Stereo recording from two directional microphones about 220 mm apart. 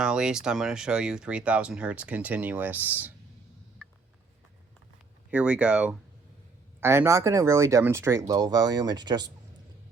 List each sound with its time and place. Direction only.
0.0 s speech: 5° right (ahead or behind)
5.3 s speech: 5° right (ahead or behind)